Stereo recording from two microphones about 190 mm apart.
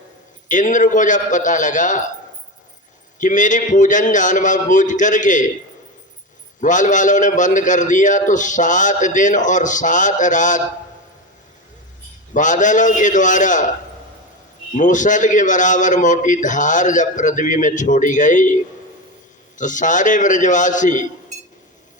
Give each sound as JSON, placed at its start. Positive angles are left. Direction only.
{"t": 0.4, "sound": "a man's voice", "side_deg": 40}
{"t": 3.2, "sound": "a man's voice", "side_deg": 40}
{"t": 6.6, "sound": "a man's voice", "side_deg": 40}
{"t": 12.3, "sound": "a man's voice", "side_deg": 40}
{"t": 14.8, "sound": "a man's voice", "side_deg": 40}
{"t": 19.5, "sound": "a man's voice", "side_deg": 40}